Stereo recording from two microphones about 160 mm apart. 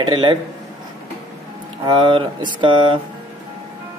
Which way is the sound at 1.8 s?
30° right (ahead or behind).